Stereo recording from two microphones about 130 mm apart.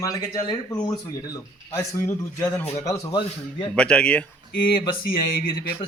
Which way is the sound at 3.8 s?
5° left (ahead or behind).